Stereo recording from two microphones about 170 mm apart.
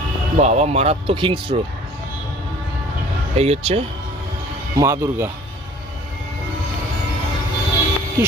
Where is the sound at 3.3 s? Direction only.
35° right (ahead or behind).